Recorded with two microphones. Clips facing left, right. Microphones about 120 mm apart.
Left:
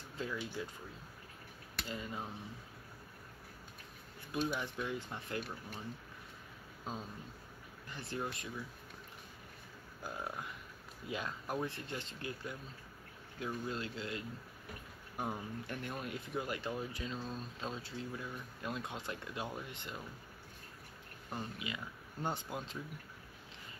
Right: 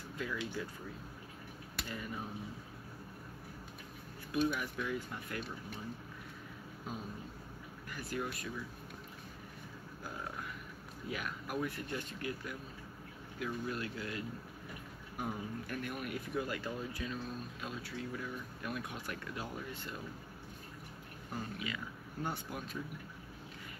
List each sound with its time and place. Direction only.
0.2 s speech: 25° left (ahead or behind)
1.9 s speech: 20° left (ahead or behind)
4.3 s speech: 25° left (ahead or behind)
6.9 s speech: 25° left (ahead or behind)
11.1 s speech: 25° left (ahead or behind)
21.3 s speech: 20° left (ahead or behind)